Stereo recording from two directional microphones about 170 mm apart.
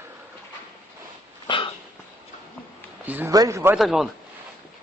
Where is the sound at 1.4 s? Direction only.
30° left (ahead or behind).